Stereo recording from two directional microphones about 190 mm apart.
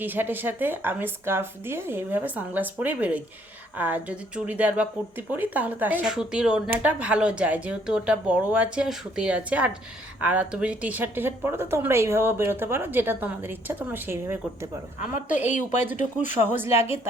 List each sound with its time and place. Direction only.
0.0 s speech: 10° right (ahead or behind)
15.4 s speech: 40° left (ahead or behind)